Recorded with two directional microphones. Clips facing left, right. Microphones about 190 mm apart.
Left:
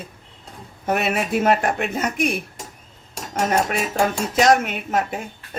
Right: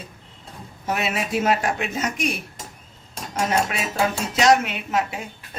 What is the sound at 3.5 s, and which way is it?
Speech, 40° left (ahead or behind).